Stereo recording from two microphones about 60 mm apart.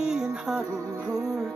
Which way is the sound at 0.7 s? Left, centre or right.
Right.